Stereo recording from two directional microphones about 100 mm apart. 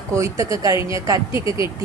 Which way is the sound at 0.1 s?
30° right (ahead or behind).